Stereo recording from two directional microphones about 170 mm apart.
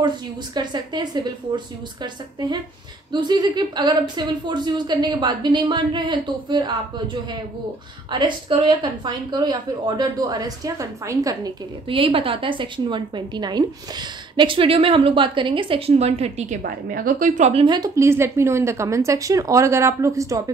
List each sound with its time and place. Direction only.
0.6 s a woman's voice: 25° right (ahead or behind)
3.1 s a woman's voice: 25° right (ahead or behind)
8.1 s a woman's voice: 25° right (ahead or behind)
16.6 s a woman's voice: 55° right (ahead or behind)
17.5 s a woman's voice: 35° right (ahead or behind)
17.7 s speech: 20° right (ahead or behind)